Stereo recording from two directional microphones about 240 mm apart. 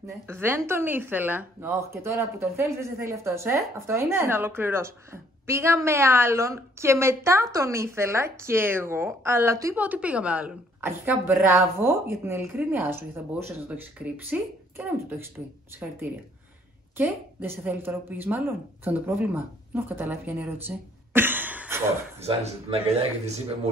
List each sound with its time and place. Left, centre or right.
0.3 s a woman's voice: centre
16.9 s a woman's voice: centre
22.2 s speech: right